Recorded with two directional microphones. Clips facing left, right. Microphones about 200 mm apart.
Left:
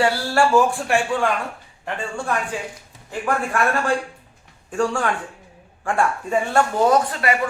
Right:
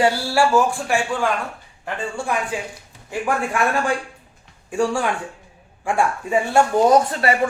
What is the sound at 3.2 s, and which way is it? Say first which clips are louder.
Speech: even; 15° right (ahead or behind).